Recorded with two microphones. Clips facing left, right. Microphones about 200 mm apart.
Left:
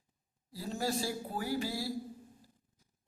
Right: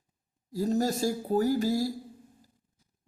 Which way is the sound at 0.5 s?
40° right (ahead or behind).